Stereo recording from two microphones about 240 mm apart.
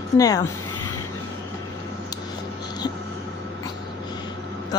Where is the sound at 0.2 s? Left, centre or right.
Centre.